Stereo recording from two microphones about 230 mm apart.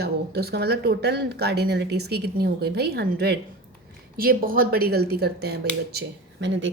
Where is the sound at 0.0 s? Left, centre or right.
Right.